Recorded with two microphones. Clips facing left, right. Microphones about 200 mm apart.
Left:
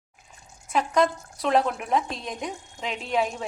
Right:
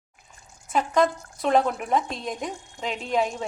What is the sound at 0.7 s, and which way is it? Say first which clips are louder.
A woman's voice: right 1 dB; centre (ahead or behind).